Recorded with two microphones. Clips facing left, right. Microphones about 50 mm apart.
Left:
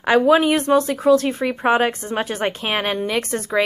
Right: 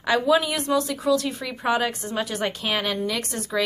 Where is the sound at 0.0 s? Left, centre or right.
Left.